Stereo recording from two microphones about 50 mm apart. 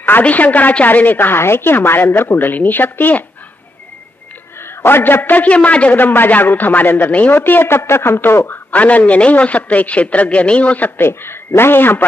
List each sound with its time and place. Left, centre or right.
0.2 s a woman's voice: left
4.6 s a man's voice: left
5.9 s speech: left
7.3 s a woman's voice: left
8.7 s a man's voice: left
11.0 s a woman's voice: left